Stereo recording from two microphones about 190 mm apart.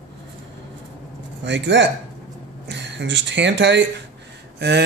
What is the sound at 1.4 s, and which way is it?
Speech, 70° right (ahead or behind).